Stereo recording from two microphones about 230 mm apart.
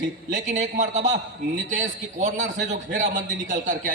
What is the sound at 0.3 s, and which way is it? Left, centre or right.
A man's voice, right.